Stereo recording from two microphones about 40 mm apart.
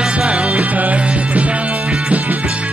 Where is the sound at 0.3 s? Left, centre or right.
Right.